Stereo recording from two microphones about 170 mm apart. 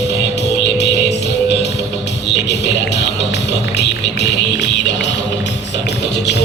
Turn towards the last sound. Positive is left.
turn(degrees=90)